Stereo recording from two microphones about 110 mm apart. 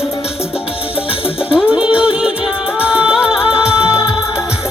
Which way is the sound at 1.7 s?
10° right (ahead or behind).